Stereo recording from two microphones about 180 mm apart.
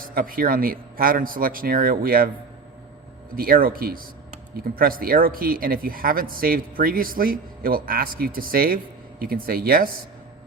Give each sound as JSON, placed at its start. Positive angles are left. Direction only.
{"t": 0.0, "sound": "speech", "side_deg": -55}
{"t": 3.3, "sound": "speech", "side_deg": -55}